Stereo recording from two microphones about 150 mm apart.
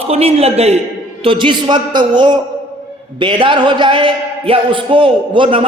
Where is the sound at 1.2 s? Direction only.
30° right (ahead or behind).